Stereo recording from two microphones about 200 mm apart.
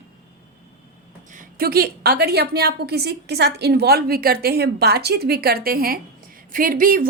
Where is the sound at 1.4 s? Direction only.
50° right (ahead or behind).